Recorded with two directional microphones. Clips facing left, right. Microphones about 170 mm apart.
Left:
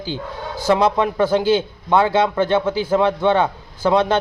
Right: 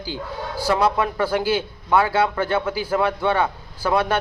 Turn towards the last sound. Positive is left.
turn(degrees=25)  # may be behind; listen again after turning